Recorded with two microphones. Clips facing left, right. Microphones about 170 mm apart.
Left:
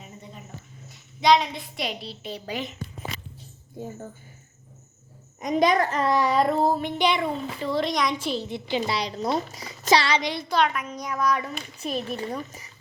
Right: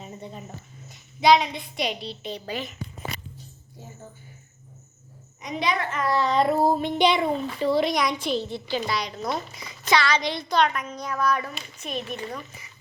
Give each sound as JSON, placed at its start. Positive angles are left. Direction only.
{"t": 1.2, "sound": "a woman's voice", "side_deg": -5}
{"t": 3.8, "sound": "a child's voice", "side_deg": 50}
{"t": 5.4, "sound": "a child's voice", "side_deg": 45}
{"t": 6.1, "sound": "a child's voice", "side_deg": 10}
{"t": 6.4, "sound": "a child's voice", "side_deg": -10}
{"t": 7.7, "sound": "a woman's voice", "side_deg": -5}
{"t": 8.4, "sound": "a woman's voice", "side_deg": 20}
{"t": 10.2, "sound": "a child's voice", "side_deg": 5}
{"t": 11.8, "sound": "speech", "side_deg": 35}